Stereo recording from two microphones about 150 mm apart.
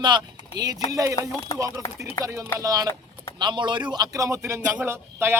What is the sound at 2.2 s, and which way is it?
Speech, 20° left (ahead or behind).